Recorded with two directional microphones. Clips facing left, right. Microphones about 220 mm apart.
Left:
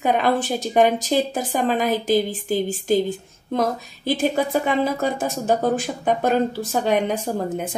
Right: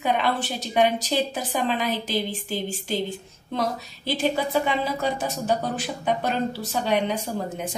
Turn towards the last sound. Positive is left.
turn(degrees=50)  # may be behind; listen again after turning